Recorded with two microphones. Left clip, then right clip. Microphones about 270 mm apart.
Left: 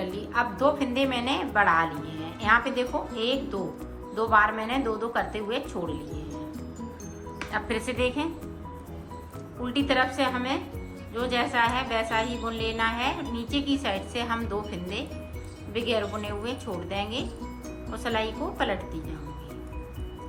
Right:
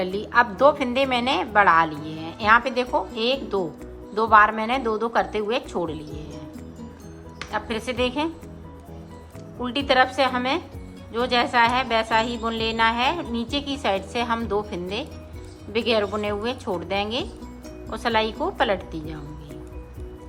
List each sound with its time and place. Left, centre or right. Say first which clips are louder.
0.3 s a woman's voice: right 7 dB; centre
2.2 s music: right 5 dB; centre
2.7 s a woman's voice: right 5 dB; centre
7.5 s a woman's voice: right 3 dB; centre
9.6 s a woman's voice: right 5 dB; centre